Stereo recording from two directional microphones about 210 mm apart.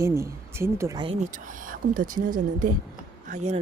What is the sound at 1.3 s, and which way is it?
Speech, 40° right (ahead or behind).